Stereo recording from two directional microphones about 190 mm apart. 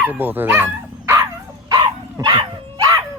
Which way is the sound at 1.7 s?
20° right (ahead or behind).